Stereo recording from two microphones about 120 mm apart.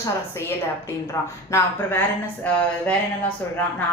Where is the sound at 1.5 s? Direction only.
20° left (ahead or behind).